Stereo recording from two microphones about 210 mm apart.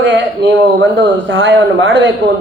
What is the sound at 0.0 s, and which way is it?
Speech, 60° right (ahead or behind).